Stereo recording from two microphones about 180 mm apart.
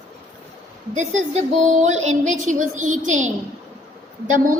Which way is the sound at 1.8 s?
40° right (ahead or behind).